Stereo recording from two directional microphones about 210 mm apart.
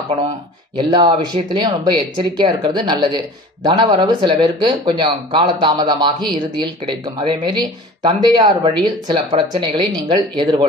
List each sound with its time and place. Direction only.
0.7 s speech: 25° right (ahead or behind)